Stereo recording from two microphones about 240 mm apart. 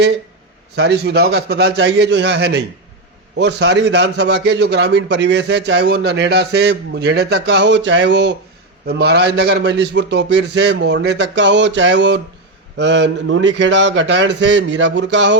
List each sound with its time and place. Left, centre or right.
0.8 s a man's voice: right